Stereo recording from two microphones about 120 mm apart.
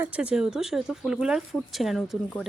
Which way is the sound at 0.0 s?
10° right (ahead or behind).